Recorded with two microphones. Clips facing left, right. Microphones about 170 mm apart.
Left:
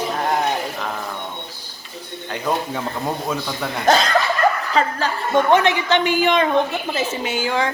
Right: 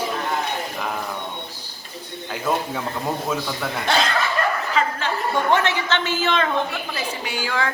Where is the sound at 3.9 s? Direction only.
40° left (ahead or behind).